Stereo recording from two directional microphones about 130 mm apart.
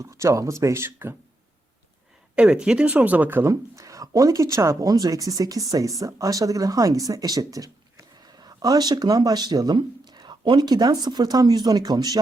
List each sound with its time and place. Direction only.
0.0 s speech: 20° right (ahead or behind)
2.3 s speech: 10° right (ahead or behind); by 12.2 s 30° right (ahead or behind)